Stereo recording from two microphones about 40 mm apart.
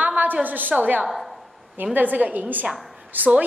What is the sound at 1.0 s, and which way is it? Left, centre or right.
Speech, centre.